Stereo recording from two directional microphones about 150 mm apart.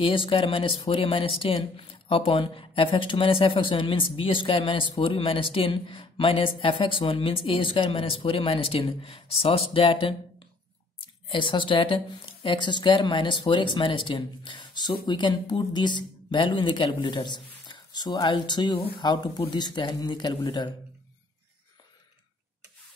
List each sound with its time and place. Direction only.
0.0 s speech: 35° left (ahead or behind)